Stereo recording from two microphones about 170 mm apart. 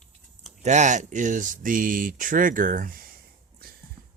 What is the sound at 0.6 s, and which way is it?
Speech, 45° right (ahead or behind).